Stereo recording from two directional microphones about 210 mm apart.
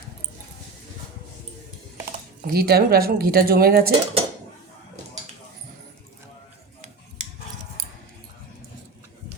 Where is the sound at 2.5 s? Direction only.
45° right (ahead or behind).